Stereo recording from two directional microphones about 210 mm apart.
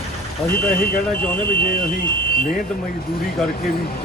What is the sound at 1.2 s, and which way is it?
Speech, 10° left (ahead or behind).